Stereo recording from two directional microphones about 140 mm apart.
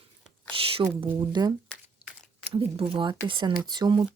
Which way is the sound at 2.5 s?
35° right (ahead or behind).